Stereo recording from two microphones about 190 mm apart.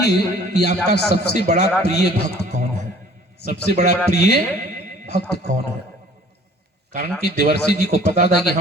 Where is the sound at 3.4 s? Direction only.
60° left (ahead or behind).